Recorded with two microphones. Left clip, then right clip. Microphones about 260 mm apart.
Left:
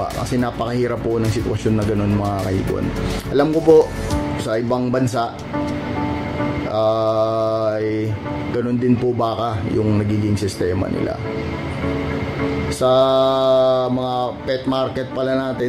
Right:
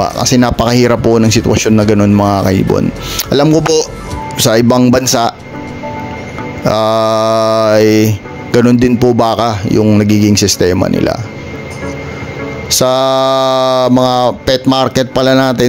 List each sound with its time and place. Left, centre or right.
0.0 s mantra: right
4.5 s mantra: right
6.7 s mantra: right
12.7 s mantra: right